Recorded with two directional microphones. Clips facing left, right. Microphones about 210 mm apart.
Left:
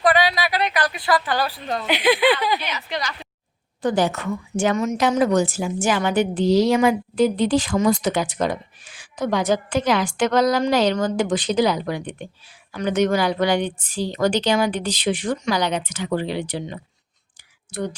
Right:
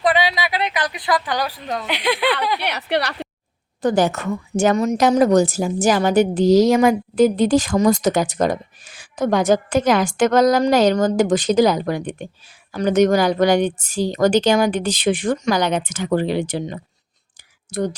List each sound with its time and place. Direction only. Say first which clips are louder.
0.0 s a sound: even; 20° right (ahead or behind)
1.9 s speech: left 3 dB; centre (ahead or behind)
2.6 s speech: right 7 dB; 65° right (ahead or behind)
3.8 s a woman's voice: right 3 dB; 45° right (ahead or behind)